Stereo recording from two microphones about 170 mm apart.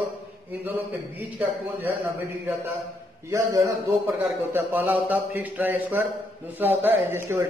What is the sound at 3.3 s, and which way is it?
Speech, 20° right (ahead or behind).